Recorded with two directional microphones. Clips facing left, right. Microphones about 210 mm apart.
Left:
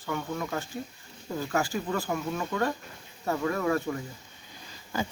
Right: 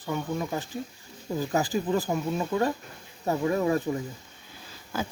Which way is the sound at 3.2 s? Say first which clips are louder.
Right 3 dB; 20° right (ahead or behind).